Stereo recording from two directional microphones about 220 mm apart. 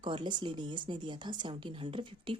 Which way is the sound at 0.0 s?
20° right (ahead or behind).